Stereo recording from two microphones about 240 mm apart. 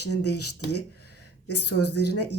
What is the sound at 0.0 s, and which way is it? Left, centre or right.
Speech, left.